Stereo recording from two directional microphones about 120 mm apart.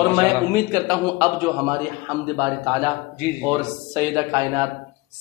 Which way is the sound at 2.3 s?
35° right (ahead or behind).